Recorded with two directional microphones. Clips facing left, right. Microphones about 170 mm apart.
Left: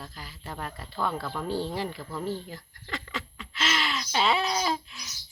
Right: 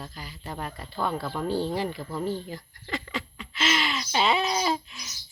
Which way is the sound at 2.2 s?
Centre (ahead or behind).